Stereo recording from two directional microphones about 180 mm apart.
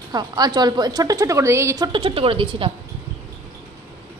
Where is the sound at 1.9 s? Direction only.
30° right (ahead or behind).